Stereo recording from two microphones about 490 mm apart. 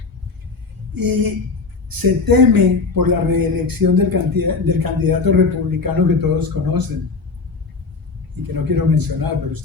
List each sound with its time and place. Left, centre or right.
0.9 s speech: right
8.7 s speech: right